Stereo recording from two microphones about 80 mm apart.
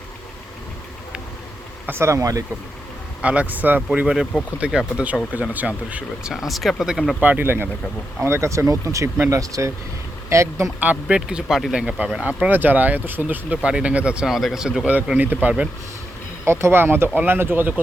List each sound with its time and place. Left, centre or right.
1.9 s speech: right
3.2 s speech: centre
3.9 s speech: centre
6.3 s speech: centre
7.2 s speech: right
10.8 s speech: centre
15.0 s speech: centre
16.5 s speech: right